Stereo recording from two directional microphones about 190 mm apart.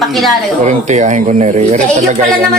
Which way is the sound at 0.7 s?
40° right (ahead or behind).